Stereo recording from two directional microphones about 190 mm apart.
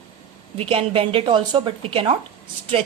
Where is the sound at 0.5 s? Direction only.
30° right (ahead or behind).